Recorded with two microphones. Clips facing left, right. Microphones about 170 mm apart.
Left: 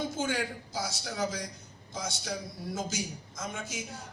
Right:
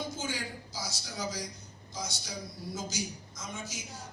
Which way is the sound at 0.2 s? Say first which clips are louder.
Left 6 dB; 55° left (ahead or behind).